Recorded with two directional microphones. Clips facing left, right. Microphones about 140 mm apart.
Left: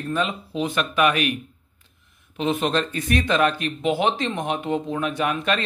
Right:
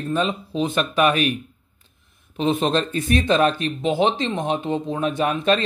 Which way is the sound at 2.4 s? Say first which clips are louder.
Right 2 dB; 30° right (ahead or behind).